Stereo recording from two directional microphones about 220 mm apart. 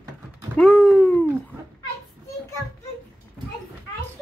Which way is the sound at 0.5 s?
Centre (ahead or behind).